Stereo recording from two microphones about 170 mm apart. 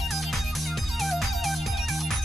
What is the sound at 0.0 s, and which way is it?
Music, centre (ahead or behind).